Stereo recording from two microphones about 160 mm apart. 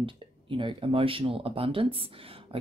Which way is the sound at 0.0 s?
30° right (ahead or behind).